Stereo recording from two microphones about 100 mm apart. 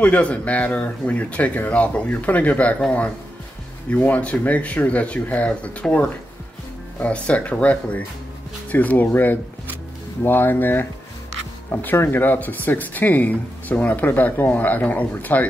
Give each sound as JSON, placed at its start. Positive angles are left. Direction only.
{"t": 0.0, "sound": "speech", "side_deg": 15}